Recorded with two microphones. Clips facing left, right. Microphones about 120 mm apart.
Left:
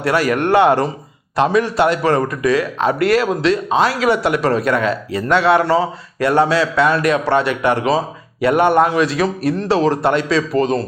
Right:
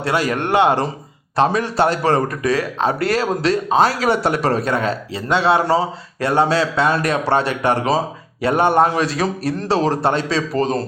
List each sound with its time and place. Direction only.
0.0 s speech: 25° right (ahead or behind)
1.4 s a man's voice: 35° right (ahead or behind)